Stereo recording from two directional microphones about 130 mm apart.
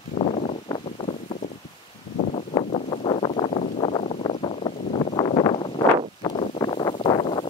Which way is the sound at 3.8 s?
40° left (ahead or behind).